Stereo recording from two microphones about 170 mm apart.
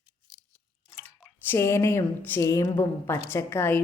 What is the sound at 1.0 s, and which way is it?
Speech, 10° left (ahead or behind).